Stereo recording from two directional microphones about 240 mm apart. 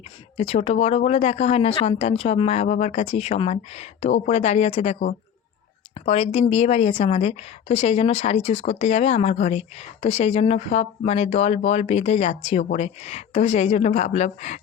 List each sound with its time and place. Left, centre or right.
0.3 s a woman's voice: left